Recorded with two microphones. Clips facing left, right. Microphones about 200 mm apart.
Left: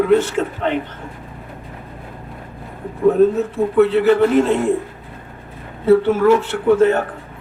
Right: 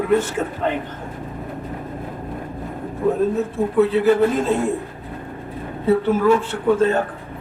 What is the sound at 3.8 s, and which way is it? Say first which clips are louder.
Speech: left 2 dB; 70° left (ahead or behind).